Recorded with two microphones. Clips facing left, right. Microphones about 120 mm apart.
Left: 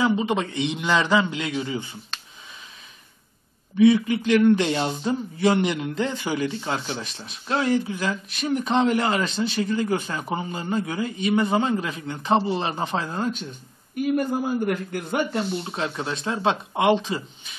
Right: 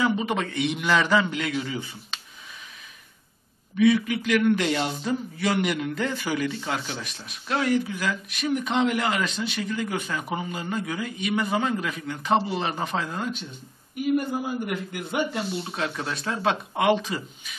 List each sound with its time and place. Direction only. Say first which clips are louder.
0.0 s speech: left 2 dB; 25° left (ahead or behind)
3.7 s a man's voice: left 3 dB; 25° left (ahead or behind); by 15.4 s 45° left (ahead or behind)
15.6 s speech: left 1 dB; 25° left (ahead or behind)